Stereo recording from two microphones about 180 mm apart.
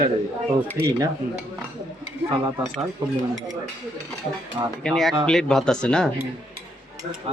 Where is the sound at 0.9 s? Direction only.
20° right (ahead or behind).